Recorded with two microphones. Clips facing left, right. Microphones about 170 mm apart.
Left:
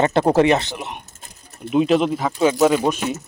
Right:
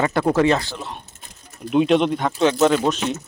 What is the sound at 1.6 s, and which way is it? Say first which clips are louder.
Speech: even; centre (ahead or behind).